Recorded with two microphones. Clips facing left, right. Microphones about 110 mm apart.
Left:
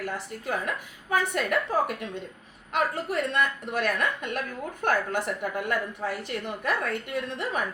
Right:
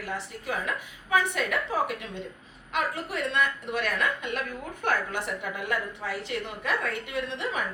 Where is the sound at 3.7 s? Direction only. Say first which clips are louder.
Left 2 dB; 50° left (ahead or behind).